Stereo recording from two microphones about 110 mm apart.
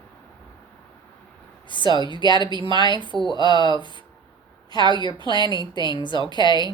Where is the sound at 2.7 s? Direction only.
45° right (ahead or behind).